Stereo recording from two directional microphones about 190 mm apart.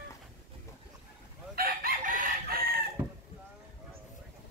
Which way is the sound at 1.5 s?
50° right (ahead or behind).